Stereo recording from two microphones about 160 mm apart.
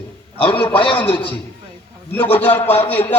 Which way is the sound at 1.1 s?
10° left (ahead or behind).